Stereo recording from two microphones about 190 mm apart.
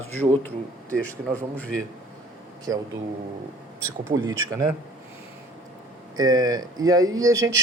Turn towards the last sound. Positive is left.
turn(degrees=-15)  # may be behind; listen again after turning